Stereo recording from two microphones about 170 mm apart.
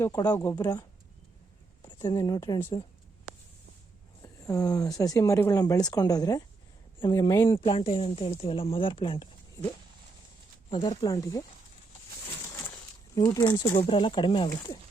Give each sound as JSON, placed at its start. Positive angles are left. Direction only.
{"t": 0.0, "sound": "speech", "side_deg": 20}
{"t": 4.2, "sound": "speech", "side_deg": 20}
{"t": 7.5, "sound": "speech", "side_deg": 30}
{"t": 10.7, "sound": "speech", "side_deg": 25}
{"t": 12.5, "sound": "speech", "side_deg": 20}